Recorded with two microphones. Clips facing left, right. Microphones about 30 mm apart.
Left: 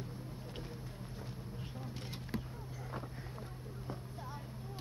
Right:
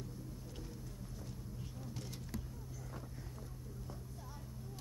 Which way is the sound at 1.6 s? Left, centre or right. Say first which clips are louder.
Left 2 dB; left.